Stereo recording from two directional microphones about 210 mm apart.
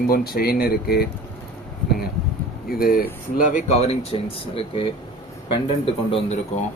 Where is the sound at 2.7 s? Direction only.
45° left (ahead or behind); by 6.3 s 25° left (ahead or behind).